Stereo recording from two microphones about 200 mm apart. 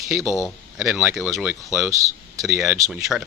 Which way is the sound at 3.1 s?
Centre (ahead or behind).